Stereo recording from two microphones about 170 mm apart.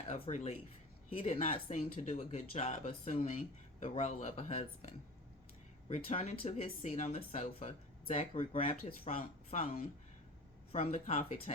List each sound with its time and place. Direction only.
0.1 s speech: 45° left (ahead or behind)
10.7 s speech: 40° left (ahead or behind)